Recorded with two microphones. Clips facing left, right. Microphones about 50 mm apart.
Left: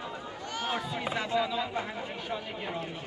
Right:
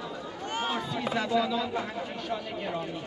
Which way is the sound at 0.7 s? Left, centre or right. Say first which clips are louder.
Left 1 dB; left.